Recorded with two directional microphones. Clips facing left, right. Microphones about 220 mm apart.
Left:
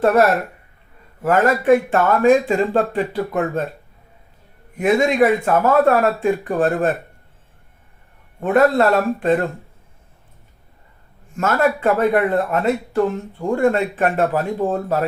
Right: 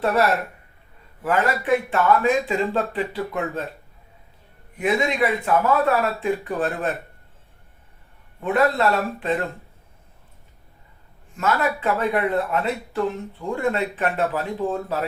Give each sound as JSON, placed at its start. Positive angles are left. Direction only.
{"t": 0.0, "sound": "a man's voice", "side_deg": 45}
{"t": 4.8, "sound": "a man's voice", "side_deg": 45}
{"t": 8.4, "sound": "a man's voice", "side_deg": 45}
{"t": 11.3, "sound": "a man's voice", "side_deg": 45}